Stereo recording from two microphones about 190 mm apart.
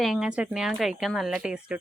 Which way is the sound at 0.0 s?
Centre (ahead or behind).